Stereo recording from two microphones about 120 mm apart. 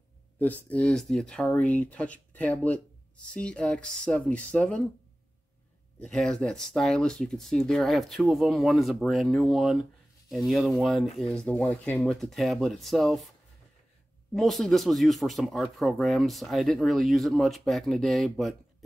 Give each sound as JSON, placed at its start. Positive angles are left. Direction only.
{"t": 0.7, "sound": "speech", "side_deg": 10}
{"t": 5.9, "sound": "speech", "side_deg": 5}
{"t": 11.4, "sound": "speech", "side_deg": 10}
{"t": 14.3, "sound": "speech", "side_deg": 0}